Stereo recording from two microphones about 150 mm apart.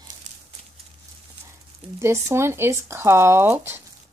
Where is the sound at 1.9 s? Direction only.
20° right (ahead or behind).